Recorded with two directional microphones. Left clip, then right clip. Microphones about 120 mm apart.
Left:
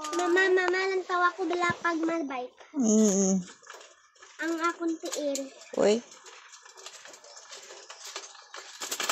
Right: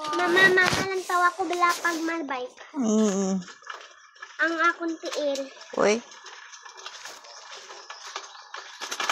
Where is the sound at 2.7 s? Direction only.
35° left (ahead or behind).